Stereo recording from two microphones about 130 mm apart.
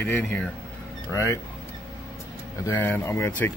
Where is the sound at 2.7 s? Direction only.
15° left (ahead or behind).